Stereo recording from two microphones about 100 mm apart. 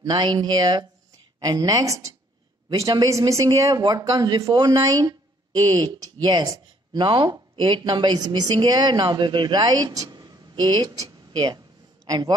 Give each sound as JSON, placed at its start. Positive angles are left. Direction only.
{"t": 0.1, "sound": "speech", "side_deg": -50}
{"t": 6.3, "sound": "a woman's voice", "side_deg": -40}